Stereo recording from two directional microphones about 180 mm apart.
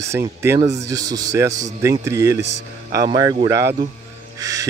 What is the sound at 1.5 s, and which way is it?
Speech, 40° right (ahead or behind).